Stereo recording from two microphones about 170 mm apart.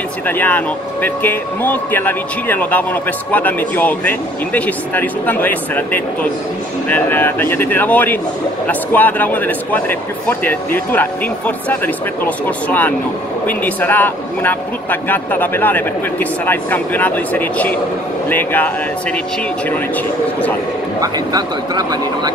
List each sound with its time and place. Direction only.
0.3 s speech: 10° left (ahead or behind)
21.0 s speech: 25° right (ahead or behind)